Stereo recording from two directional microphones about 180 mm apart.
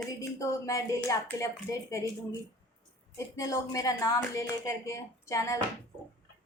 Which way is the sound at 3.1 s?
15° left (ahead or behind).